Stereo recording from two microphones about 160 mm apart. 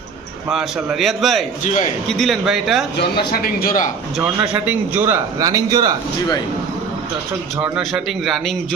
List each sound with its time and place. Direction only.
0.5 s a man's voice: centre (ahead or behind)
1.6 s a man's voice: 50° left (ahead or behind)
2.0 s a man's voice: centre (ahead or behind)
3.0 s a man's voice: 80° left
4.2 s a man's voice: 10° right (ahead or behind)
7.6 s a man's voice: 5° right (ahead or behind)